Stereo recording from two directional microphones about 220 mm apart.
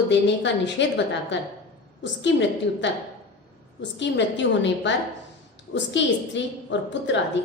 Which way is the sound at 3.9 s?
55° left (ahead or behind).